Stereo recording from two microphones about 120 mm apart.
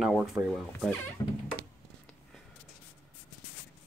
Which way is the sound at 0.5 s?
5° left (ahead or behind).